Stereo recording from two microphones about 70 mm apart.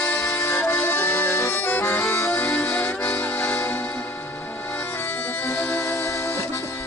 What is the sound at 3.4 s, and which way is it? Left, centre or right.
Music, left.